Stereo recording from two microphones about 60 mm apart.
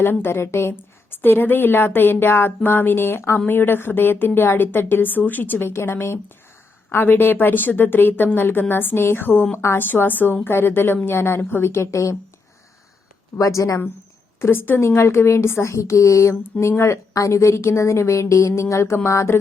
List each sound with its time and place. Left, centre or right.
0.0 s a woman's voice: left
1.1 s a woman's voice: left
13.4 s speech: left
14.3 s a woman's voice: left
16.3 s a woman's voice: left